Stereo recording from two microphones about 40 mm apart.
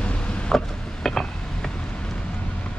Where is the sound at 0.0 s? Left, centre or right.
Left.